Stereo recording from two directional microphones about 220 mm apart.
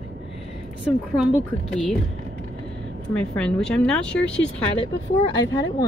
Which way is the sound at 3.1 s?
5° left (ahead or behind).